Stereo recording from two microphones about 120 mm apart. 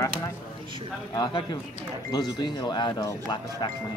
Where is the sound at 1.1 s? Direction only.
35° left (ahead or behind).